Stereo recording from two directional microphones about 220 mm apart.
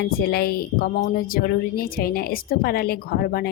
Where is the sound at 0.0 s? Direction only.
45° left (ahead or behind).